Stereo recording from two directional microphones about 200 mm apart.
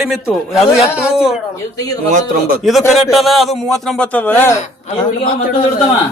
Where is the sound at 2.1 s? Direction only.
35° right (ahead or behind).